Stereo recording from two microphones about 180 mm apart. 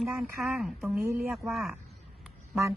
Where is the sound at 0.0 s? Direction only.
Centre (ahead or behind).